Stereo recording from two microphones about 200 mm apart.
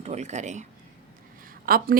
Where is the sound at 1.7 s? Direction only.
45° right (ahead or behind).